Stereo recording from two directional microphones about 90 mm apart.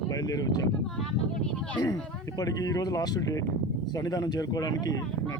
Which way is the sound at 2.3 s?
45° left (ahead or behind).